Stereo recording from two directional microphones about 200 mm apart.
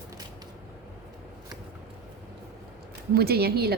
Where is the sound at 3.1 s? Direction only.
50° right (ahead or behind).